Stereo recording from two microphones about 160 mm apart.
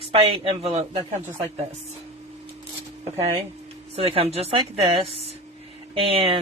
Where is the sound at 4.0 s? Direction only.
35° right (ahead or behind).